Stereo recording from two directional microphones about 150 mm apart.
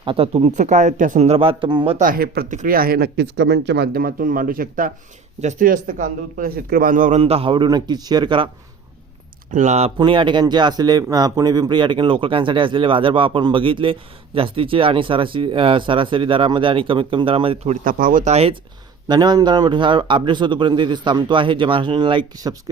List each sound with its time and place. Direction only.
0.0 s speech: 35° right (ahead or behind)
2.0 s speech: 75° right (ahead or behind)
2.6 s speech: 75° right (ahead or behind)
5.4 s a man's voice: 55° right (ahead or behind)
7.2 s speech: 40° right (ahead or behind)
9.5 s speech: 50° right (ahead or behind)
10.0 s speech: 35° right (ahead or behind)
17.8 s a man's voice: 65° right (ahead or behind); by 18.5 s 45° right (ahead or behind)
19.0 s speech: 30° right (ahead or behind)